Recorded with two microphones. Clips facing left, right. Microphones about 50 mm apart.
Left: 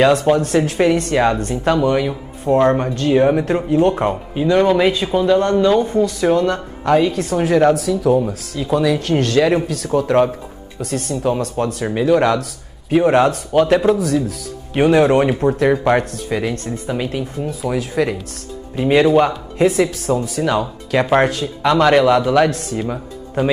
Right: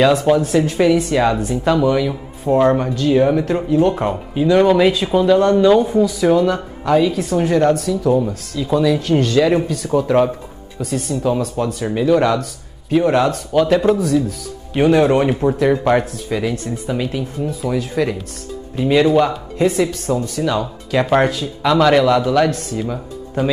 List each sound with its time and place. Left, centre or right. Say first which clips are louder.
0.0 s speech: even; centre
3.1 s speech: left 1 dB; centre
11.6 s speech: left 1 dB; centre
16.3 s speech: even; centre
18.8 s speech: left 1 dB; centre
19.6 s speech: left 1 dB; centre
22.8 s speech: even; centre